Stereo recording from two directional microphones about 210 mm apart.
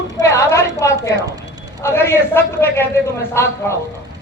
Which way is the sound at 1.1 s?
20° right (ahead or behind).